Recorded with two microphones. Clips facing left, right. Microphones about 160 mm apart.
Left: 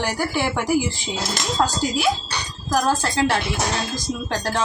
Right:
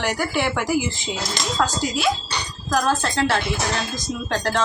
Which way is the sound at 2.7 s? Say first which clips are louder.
Left 1 dB; 10° left (ahead or behind).